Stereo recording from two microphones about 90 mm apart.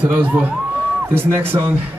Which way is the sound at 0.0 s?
20° right (ahead or behind).